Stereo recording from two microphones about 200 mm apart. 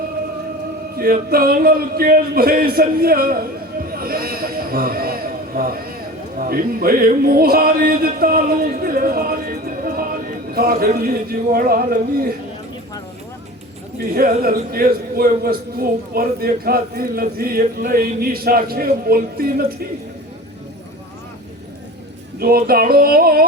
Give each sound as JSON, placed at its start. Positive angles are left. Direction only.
{"t": 0.9, "sound": "speech", "side_deg": -50}
{"t": 6.4, "sound": "music", "side_deg": -45}
{"t": 14.1, "sound": "a man's voice", "side_deg": -45}
{"t": 22.4, "sound": "a man's voice", "side_deg": -50}